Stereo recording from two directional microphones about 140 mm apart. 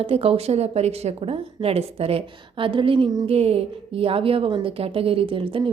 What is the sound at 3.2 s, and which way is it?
A woman's voice, 45° right (ahead or behind).